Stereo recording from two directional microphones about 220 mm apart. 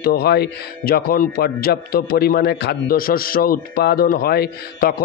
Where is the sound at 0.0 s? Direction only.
45° left (ahead or behind).